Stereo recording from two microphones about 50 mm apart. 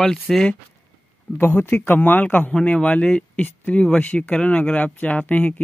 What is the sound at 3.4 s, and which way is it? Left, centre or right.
Speech, left.